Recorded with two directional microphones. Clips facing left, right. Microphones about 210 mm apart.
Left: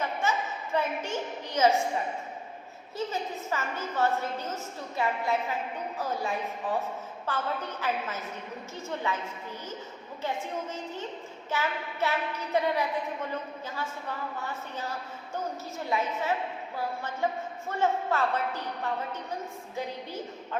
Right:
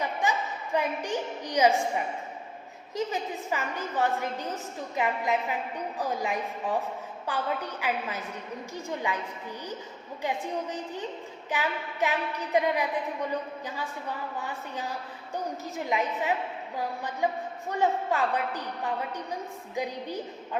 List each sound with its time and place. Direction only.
0.0 s a sound: 15° right (ahead or behind)
2.9 s a woman's voice: 15° right (ahead or behind)
10.2 s a woman's voice: 15° right (ahead or behind)
14.3 s a woman's voice: 15° right (ahead or behind)